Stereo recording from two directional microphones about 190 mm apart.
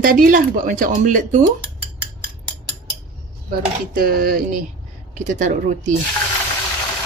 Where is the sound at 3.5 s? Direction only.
50° right (ahead or behind).